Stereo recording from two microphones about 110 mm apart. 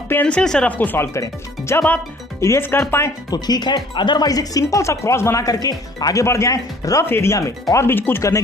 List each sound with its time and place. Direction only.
0.1 s speech: 10° left (ahead or behind)
3.3 s speech: 40° left (ahead or behind)